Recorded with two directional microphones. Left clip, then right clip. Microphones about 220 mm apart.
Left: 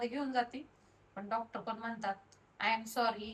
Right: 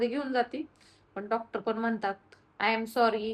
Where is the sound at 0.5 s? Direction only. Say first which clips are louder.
Right 10 dB; 5° right (ahead or behind).